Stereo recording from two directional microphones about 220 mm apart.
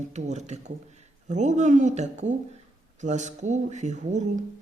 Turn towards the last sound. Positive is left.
turn(degrees=-35)  # may be behind; listen again after turning